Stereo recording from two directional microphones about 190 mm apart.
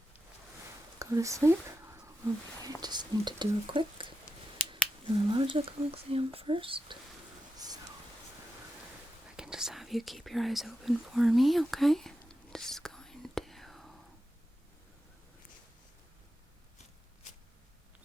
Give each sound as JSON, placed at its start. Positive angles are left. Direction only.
{"t": 0.9, "sound": "whispering", "side_deg": -15}
{"t": 2.8, "sound": "speech", "side_deg": -20}
{"t": 9.3, "sound": "whispering", "side_deg": -5}